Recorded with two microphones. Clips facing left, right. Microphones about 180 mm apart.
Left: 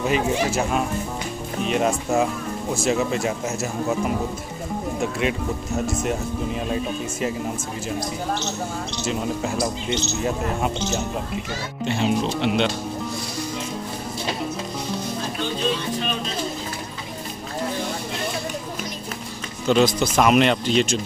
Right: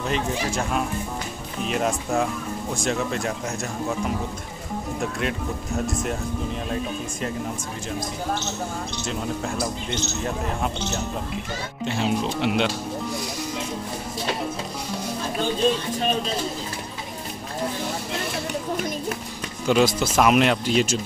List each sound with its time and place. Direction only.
0.0 s speech: 5° left (ahead or behind)
5.0 s speech: centre (ahead or behind)
9.0 s speech: 5° left (ahead or behind)
11.8 s speech: centre (ahead or behind)
19.6 s speech: 10° right (ahead or behind)